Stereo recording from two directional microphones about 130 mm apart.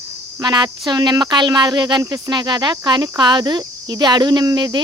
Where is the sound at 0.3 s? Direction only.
30° right (ahead or behind).